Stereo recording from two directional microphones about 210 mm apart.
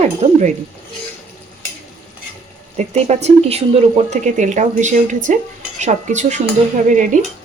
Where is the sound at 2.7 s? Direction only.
30° right (ahead or behind).